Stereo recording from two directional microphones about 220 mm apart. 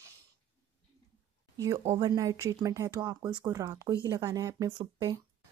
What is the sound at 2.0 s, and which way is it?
Speech, 15° right (ahead or behind).